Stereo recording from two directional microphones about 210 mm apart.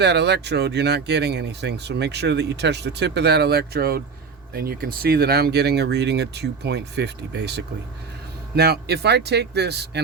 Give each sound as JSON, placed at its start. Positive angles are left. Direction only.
{"t": 0.0, "sound": "speech", "side_deg": -55}